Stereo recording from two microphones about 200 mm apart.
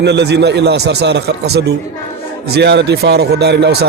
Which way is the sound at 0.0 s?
55° right (ahead or behind).